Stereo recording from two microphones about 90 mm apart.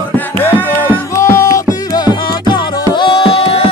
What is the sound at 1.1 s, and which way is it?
Music, 35° left (ahead or behind).